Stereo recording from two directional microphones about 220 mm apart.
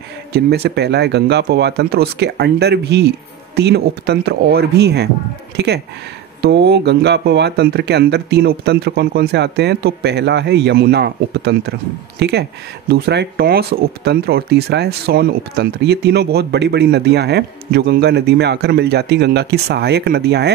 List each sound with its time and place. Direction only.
0.3 s speech: 45° right (ahead or behind)
6.4 s speech: 50° right (ahead or behind)